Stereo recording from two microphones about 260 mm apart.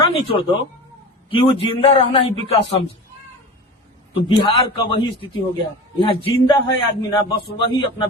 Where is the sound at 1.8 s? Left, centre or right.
Left.